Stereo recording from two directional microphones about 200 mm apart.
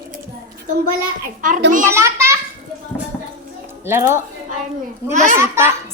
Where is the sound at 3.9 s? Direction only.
10° right (ahead or behind).